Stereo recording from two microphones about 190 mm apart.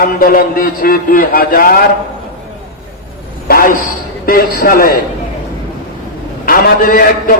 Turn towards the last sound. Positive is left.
turn(degrees=50)  # may be behind; listen again after turning